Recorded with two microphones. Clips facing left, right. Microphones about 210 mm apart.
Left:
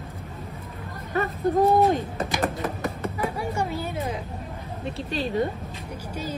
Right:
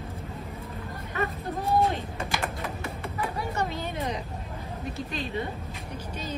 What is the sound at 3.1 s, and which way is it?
Music, 10° left (ahead or behind).